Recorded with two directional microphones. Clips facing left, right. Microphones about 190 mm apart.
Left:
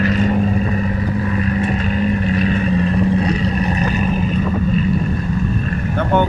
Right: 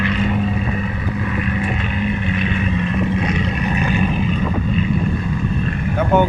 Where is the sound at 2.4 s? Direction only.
40° left (ahead or behind).